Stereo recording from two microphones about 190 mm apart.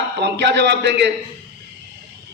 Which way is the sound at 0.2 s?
65° right (ahead or behind).